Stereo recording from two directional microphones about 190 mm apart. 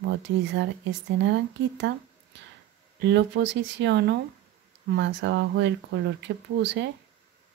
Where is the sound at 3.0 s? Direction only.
65° right (ahead or behind).